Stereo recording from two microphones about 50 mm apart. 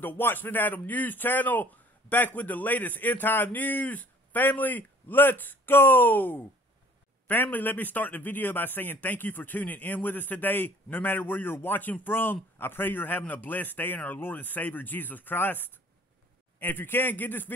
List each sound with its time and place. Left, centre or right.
0.0 s speech: left